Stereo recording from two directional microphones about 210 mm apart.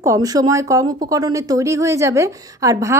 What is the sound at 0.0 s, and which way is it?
A woman's voice, 15° right (ahead or behind).